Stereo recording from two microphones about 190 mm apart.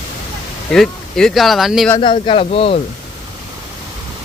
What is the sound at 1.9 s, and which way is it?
Speech, 25° left (ahead or behind).